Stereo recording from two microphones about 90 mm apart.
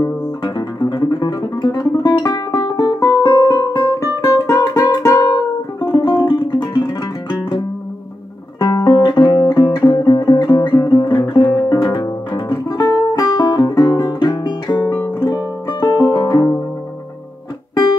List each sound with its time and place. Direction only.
0.0 s music: 50° left (ahead or behind)
13.9 s guitar: 50° left (ahead or behind)
15.2 s music: 50° left (ahead or behind)